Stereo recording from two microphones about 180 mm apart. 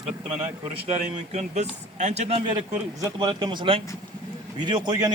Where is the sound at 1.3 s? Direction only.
40° right (ahead or behind).